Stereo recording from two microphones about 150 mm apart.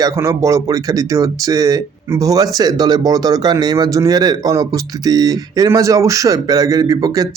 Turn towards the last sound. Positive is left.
turn(degrees=-25)  # may be behind; listen again after turning